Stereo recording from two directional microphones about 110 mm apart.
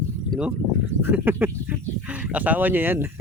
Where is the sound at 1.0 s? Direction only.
20° right (ahead or behind).